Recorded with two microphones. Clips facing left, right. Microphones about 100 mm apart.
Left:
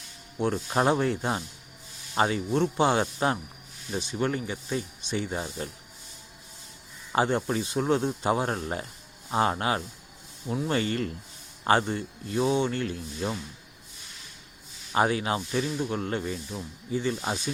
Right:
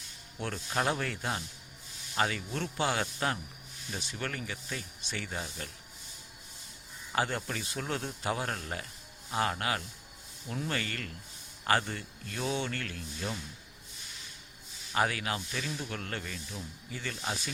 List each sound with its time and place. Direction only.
0.3 s speech: 20° left (ahead or behind)
7.2 s speech: 25° left (ahead or behind)
14.9 s speech: 25° left (ahead or behind)